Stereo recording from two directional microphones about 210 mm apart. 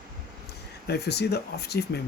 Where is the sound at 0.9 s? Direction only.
50° left (ahead or behind).